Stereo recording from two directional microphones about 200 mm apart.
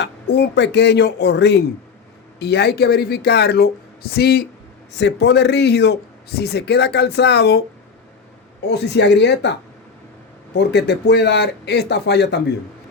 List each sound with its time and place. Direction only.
0.0 s a man's voice: 60° left (ahead or behind)
8.6 s a man's voice: 60° left (ahead or behind)